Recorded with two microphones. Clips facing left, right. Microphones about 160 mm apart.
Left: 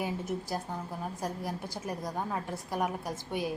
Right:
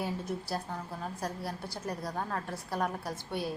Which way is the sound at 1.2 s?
15° left (ahead or behind).